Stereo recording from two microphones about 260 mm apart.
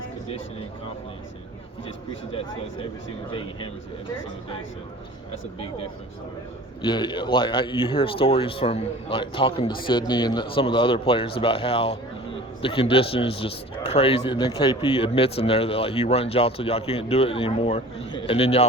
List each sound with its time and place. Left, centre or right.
6.8 s speech: centre